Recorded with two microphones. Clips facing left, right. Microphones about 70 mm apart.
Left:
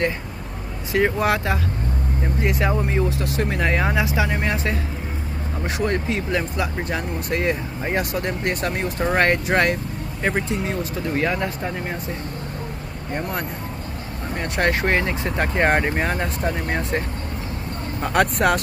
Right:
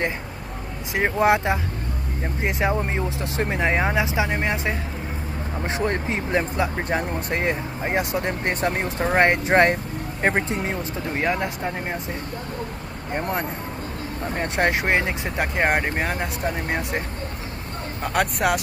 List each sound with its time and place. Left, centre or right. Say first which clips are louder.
0.9 s speech: even; right
11.1 s speech: left 1 dB; centre
14.3 s speech: left 1 dB; right
15.3 s speech: left 2 dB; centre
18.0 s speech: left 3 dB; centre